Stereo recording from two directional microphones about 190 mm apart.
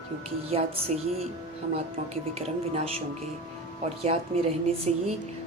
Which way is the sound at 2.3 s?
30° right (ahead or behind).